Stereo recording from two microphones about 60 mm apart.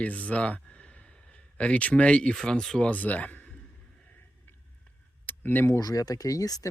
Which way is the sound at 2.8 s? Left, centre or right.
Left.